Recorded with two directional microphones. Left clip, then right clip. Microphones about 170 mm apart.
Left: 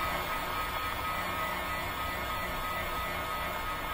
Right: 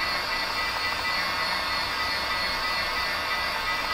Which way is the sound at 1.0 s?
20° right (ahead or behind).